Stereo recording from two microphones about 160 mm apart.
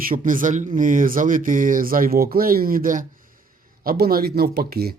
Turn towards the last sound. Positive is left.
turn(degrees=-75)  # may be behind; listen again after turning